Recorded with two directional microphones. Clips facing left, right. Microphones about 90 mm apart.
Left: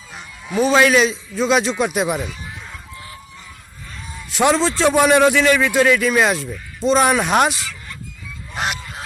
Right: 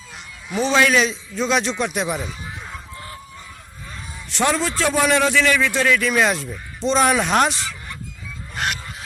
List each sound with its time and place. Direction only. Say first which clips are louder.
0.5 s a man's voice: left 3 dB; 5° left (ahead or behind)
4.4 s a man's voice: left 5 dB; 25° left (ahead or behind); by 7.6 s 5° left (ahead or behind)